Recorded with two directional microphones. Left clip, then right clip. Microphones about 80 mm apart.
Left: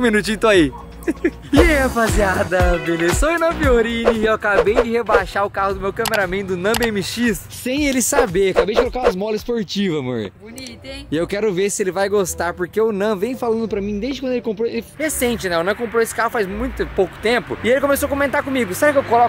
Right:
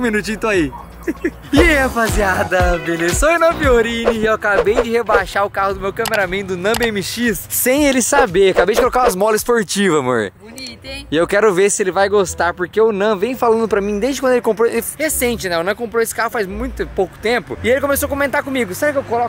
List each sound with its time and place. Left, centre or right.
0.0 s speech: centre
7.6 s speech: right
7.9 s speech: right
9.1 s speech: right
11.8 s speech: right
15.0 s speech: centre